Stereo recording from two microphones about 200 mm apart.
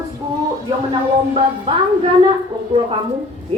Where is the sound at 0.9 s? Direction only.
25° right (ahead or behind).